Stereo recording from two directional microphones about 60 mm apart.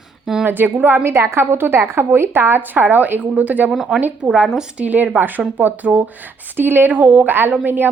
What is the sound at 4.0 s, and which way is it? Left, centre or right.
Speech, right.